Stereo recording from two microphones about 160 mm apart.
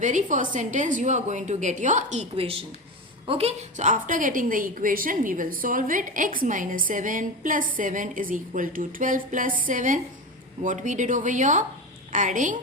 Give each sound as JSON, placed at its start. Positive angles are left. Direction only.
{"t": 0.0, "sound": "a woman's voice", "side_deg": -50}